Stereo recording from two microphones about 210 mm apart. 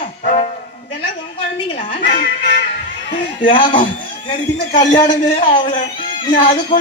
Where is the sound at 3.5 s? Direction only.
25° left (ahead or behind).